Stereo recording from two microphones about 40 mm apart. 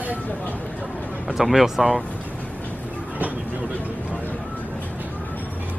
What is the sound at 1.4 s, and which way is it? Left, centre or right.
Speech, centre.